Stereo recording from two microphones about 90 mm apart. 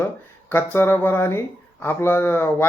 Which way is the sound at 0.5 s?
25° left (ahead or behind).